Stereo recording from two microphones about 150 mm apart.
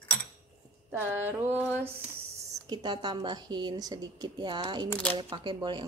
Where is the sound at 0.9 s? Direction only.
15° right (ahead or behind).